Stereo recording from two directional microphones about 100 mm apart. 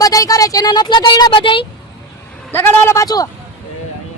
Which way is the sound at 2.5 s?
25° left (ahead or behind).